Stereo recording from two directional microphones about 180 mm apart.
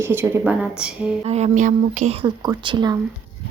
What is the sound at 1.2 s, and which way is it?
Speech, 35° right (ahead or behind).